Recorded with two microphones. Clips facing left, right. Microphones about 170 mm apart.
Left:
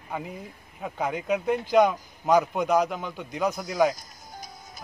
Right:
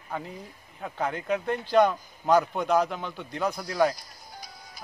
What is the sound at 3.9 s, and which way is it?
Music, 45° left (ahead or behind).